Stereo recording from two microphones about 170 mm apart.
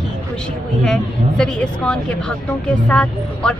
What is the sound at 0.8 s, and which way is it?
Speech, 5° left (ahead or behind).